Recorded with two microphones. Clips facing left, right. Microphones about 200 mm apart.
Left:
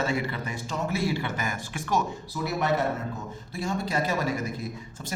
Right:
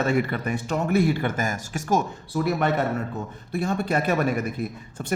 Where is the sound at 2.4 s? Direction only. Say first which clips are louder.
Right 4 dB; 55° right (ahead or behind).